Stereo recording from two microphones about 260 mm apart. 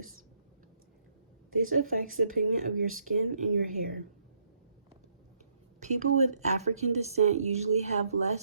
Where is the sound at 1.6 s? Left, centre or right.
Right.